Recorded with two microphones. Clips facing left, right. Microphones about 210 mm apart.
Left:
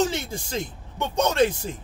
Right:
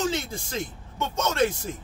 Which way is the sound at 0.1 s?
15° left (ahead or behind).